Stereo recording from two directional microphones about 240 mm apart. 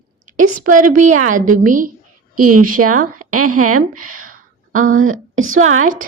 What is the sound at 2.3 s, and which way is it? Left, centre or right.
A woman's voice, right.